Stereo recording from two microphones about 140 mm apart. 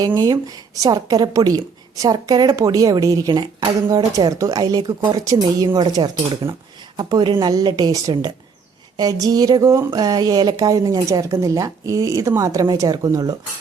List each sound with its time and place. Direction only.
0.2 s speech: 25° right (ahead or behind)